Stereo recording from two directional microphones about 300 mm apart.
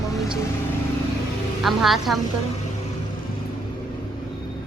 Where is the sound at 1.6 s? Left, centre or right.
Centre.